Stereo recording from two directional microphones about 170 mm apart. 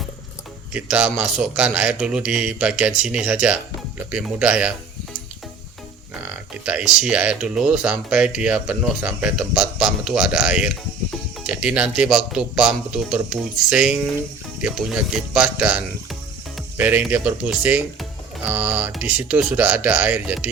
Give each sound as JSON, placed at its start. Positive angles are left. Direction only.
{"t": 0.7, "sound": "speech", "side_deg": -5}
{"t": 6.2, "sound": "speech", "side_deg": -5}